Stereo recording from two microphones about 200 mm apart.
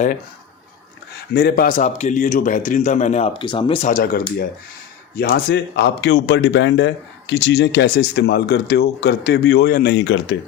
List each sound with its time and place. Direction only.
1.3 s a man's voice: 50° left (ahead or behind); by 3.8 s 25° left (ahead or behind)
3.8 s a man's voice: 45° left (ahead or behind); by 10.3 s 60° left (ahead or behind)